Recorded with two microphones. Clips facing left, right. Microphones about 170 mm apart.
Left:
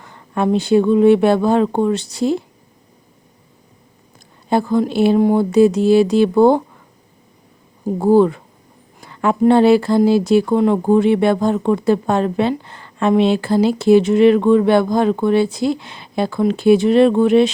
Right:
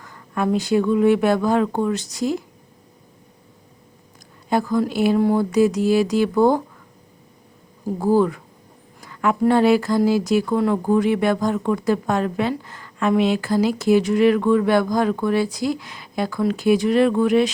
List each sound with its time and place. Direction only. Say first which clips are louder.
0.0 s speech: left 4 dB; 25° left (ahead or behind)
4.4 s speech: left 4 dB; 30° left (ahead or behind)
7.9 s speech: left 5 dB; 25° left (ahead or behind)